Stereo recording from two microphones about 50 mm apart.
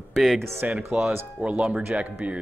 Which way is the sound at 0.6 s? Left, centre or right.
Right.